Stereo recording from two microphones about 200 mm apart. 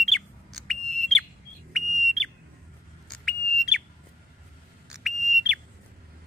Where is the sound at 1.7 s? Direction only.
Centre (ahead or behind).